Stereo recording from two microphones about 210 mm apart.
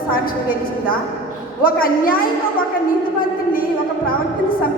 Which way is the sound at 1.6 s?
45° left (ahead or behind).